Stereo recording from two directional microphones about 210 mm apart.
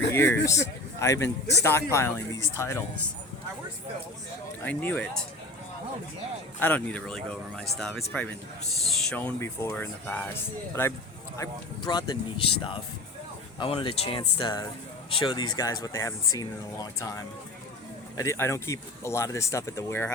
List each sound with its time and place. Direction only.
0.1 s speech: 10° left (ahead or behind)
4.6 s speech: 10° left (ahead or behind)
6.6 s speech: 10° left (ahead or behind)
11.3 s speech: 20° left (ahead or behind)